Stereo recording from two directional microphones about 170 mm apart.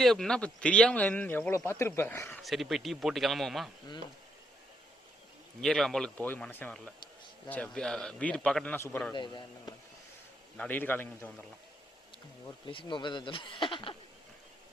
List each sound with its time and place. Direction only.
0.0 s speech: centre (ahead or behind)
2.4 s a man's voice: centre (ahead or behind)
5.5 s a man's voice: centre (ahead or behind)
9.1 s speech: 25° left (ahead or behind)
10.6 s speech: 10° left (ahead or behind)
12.6 s speech: 30° left (ahead or behind)